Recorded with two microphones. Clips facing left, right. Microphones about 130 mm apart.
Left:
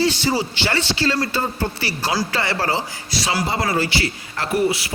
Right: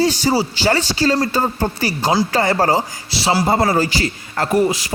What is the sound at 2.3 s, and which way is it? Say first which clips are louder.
Music: right 6 dB; 45° right (ahead or behind).